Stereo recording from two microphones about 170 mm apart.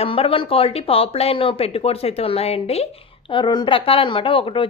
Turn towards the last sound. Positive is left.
turn(degrees=30)  # may be behind; listen again after turning